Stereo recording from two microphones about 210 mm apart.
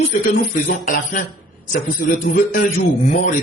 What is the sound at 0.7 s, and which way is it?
Speech, 40° left (ahead or behind).